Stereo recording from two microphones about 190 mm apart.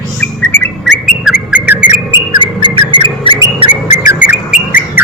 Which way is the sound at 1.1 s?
5° right (ahead or behind).